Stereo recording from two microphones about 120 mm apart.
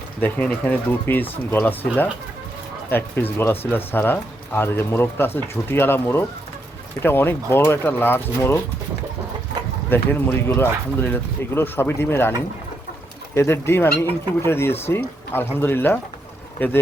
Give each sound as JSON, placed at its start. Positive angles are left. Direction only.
{"t": 0.2, "sound": "speech", "side_deg": 15}
{"t": 2.9, "sound": "speech", "side_deg": 15}
{"t": 9.9, "sound": "speech", "side_deg": 15}
{"t": 13.3, "sound": "speech", "side_deg": 20}